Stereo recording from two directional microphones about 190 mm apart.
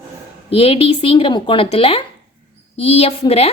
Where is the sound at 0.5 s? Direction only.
30° left (ahead or behind).